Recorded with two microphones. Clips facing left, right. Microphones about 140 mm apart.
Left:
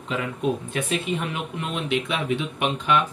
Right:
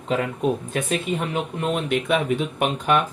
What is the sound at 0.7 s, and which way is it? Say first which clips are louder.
Speech: right 2 dB; 40° right (ahead or behind).